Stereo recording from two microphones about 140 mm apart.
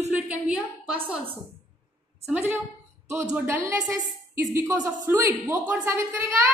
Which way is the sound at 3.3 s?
20° right (ahead or behind).